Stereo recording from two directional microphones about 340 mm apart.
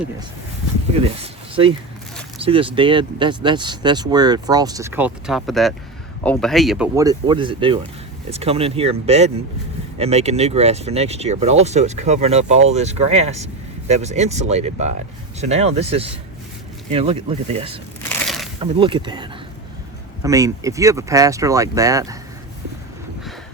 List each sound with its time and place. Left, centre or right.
2.4 s speech: centre
18.1 s a sound: centre
18.6 s speech: centre